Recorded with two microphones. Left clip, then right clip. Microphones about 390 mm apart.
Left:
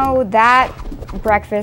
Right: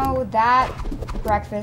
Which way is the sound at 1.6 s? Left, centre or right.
Left.